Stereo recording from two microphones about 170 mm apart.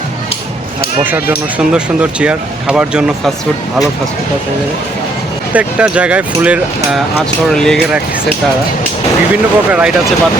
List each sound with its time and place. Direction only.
1.5 s speech: 5° right (ahead or behind)
5.5 s speech: 5° right (ahead or behind)
7.5 s speech: 5° left (ahead or behind)
9.3 s speech: 5° right (ahead or behind)